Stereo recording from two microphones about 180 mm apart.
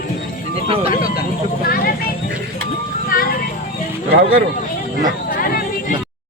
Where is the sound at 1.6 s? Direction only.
55° left (ahead or behind).